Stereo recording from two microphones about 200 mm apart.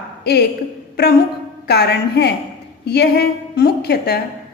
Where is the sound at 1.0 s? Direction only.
50° left (ahead or behind).